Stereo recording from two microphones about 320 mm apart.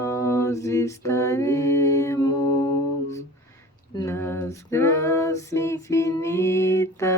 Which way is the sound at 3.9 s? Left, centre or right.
Centre.